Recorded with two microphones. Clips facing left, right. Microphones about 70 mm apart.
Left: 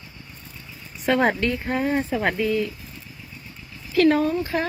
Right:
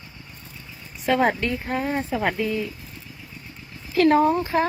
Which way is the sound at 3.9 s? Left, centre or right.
Right.